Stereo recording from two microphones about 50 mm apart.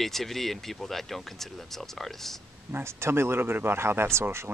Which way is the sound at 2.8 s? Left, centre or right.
Right.